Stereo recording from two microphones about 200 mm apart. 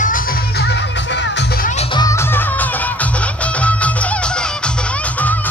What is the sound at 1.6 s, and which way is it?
Music, 35° left (ahead or behind).